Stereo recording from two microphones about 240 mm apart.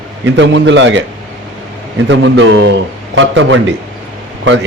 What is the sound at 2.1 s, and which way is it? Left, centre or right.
A man's voice, right.